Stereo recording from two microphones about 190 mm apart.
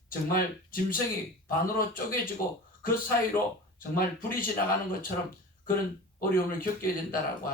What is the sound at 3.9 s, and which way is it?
Speech, 50° left (ahead or behind).